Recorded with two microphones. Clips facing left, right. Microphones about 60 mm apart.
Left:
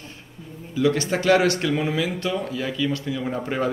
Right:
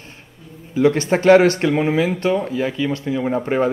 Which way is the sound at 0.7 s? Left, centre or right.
Right.